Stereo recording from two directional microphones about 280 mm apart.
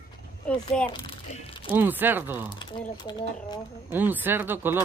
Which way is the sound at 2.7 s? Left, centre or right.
Centre.